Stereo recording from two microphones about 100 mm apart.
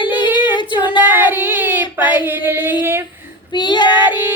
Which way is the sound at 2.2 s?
20° right (ahead or behind).